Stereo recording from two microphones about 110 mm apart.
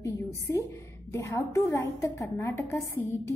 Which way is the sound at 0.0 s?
25° left (ahead or behind).